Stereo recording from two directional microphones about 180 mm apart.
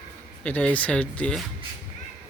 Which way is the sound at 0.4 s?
10° left (ahead or behind).